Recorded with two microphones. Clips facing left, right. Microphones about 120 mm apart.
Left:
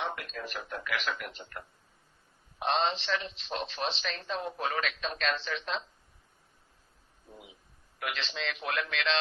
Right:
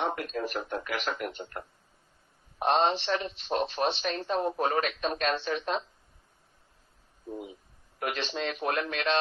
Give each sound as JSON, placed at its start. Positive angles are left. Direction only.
{"t": 0.0, "sound": "speech", "side_deg": -40}
{"t": 2.6, "sound": "speech", "side_deg": -45}
{"t": 7.2, "sound": "speech", "side_deg": -45}